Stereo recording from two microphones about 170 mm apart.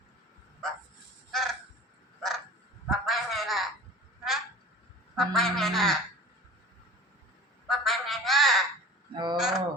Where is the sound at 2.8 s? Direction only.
Centre (ahead or behind).